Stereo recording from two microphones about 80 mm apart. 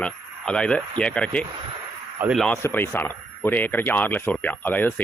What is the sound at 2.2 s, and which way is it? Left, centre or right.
Speech, right.